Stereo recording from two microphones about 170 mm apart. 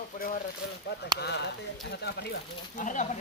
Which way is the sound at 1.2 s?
80° left.